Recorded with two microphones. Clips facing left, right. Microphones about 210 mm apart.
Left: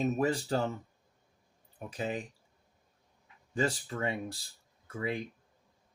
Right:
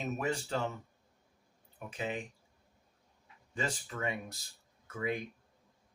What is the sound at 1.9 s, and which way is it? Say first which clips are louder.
Speech: left 2 dB; 40° left (ahead or behind).